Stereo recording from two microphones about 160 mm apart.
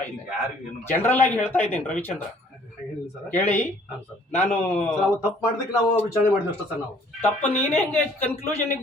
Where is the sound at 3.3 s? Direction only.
15° left (ahead or behind).